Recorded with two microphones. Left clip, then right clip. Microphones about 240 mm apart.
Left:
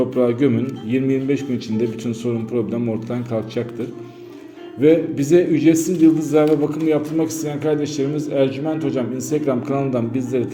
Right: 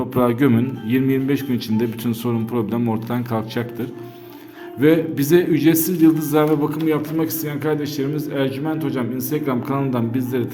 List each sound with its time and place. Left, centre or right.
0.1 s a man's voice: right
4.8 s a man's voice: right